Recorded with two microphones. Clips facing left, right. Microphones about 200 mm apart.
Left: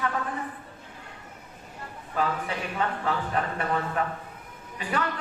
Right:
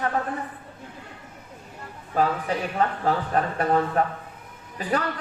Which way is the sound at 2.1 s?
40° right (ahead or behind).